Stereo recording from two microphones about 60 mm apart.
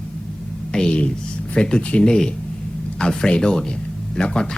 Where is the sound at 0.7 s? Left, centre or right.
Centre.